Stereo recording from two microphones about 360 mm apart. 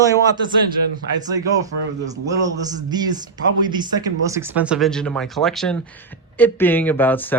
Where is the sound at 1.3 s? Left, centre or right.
Centre.